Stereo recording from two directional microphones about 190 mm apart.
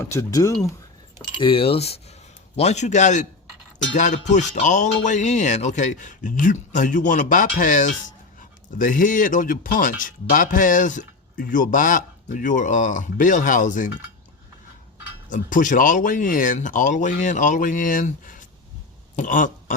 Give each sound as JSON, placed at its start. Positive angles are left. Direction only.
{"t": 0.0, "sound": "speech", "side_deg": 15}
{"t": 1.4, "sound": "speech", "side_deg": 30}
{"t": 15.3, "sound": "speech", "side_deg": 45}